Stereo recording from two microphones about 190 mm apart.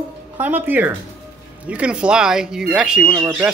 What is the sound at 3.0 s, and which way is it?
Speech, 20° right (ahead or behind).